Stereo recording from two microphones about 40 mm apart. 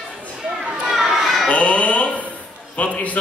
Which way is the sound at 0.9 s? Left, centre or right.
Centre.